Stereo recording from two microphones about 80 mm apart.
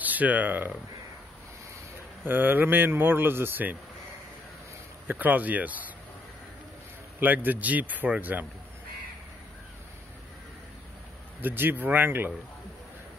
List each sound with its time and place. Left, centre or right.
0.0 s speech: right
2.2 s a man's voice: right
5.0 s a man's voice: right
7.2 s a man's voice: right
11.4 s a man's voice: right